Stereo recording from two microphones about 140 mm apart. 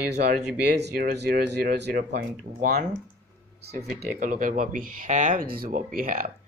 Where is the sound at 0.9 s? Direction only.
90° right.